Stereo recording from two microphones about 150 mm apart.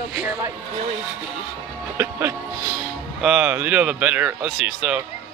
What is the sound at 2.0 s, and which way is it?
Speech, 15° right (ahead or behind).